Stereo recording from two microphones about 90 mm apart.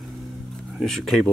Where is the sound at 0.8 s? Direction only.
Centre (ahead or behind).